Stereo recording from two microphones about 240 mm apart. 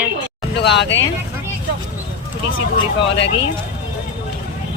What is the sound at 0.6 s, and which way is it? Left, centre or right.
Speech, left.